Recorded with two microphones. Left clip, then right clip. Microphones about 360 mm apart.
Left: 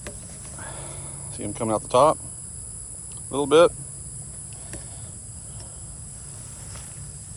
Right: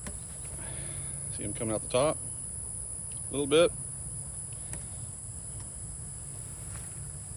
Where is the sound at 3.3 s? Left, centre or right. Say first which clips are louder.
Left 8 dB; centre.